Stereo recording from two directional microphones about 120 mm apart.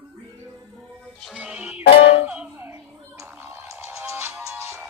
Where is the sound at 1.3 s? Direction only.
10° right (ahead or behind).